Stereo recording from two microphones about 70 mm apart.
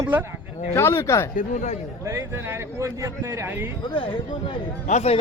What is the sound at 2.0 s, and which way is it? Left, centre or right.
Speech, right.